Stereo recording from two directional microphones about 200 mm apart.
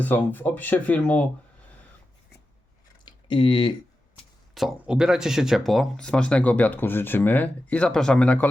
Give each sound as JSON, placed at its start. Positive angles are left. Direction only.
{"t": 0.0, "sound": "speech", "side_deg": 10}
{"t": 3.0, "sound": "a sound", "side_deg": 25}
{"t": 4.5, "sound": "speech", "side_deg": 0}